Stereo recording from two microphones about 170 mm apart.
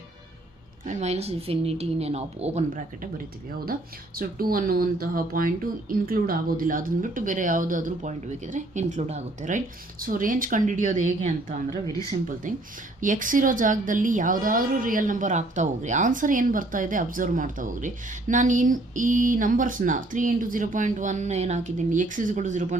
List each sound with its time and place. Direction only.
0.9 s a woman's voice: 40° right (ahead or behind)
3.7 s a woman's voice: 60° right (ahead or behind)
11.7 s speech: 20° left (ahead or behind)
12.4 s a woman's voice: 50° right (ahead or behind)